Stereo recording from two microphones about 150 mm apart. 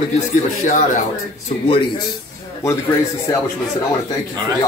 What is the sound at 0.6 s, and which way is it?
Speech, 55° left (ahead or behind).